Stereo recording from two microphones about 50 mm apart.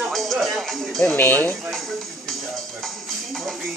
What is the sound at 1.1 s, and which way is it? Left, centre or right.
Speech, left.